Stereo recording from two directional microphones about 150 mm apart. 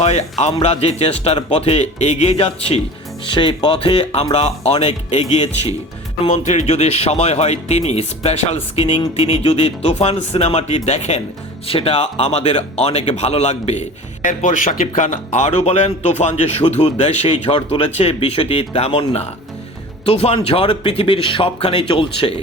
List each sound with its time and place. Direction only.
0.0 s speech: 45° left (ahead or behind)
14.3 s speech: 60° left (ahead or behind); by 22.4 s 35° left (ahead or behind)